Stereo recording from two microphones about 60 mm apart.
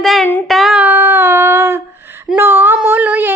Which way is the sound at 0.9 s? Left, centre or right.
Right.